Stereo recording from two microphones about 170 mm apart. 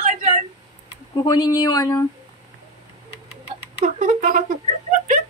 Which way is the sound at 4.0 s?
45° right (ahead or behind).